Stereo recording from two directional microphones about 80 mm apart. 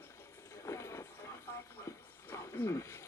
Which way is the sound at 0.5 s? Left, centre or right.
Left.